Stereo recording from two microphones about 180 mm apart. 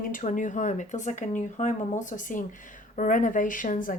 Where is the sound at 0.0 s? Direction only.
45° left (ahead or behind).